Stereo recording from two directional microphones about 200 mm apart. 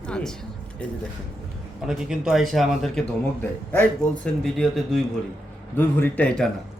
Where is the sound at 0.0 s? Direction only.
5° left (ahead or behind).